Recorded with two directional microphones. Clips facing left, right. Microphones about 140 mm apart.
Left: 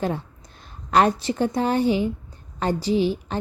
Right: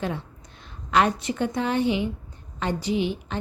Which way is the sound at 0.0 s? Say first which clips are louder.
Left 4 dB; 40° left (ahead or behind).